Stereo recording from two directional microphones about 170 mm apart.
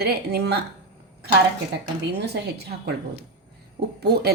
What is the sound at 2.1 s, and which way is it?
Speech, 75° right (ahead or behind).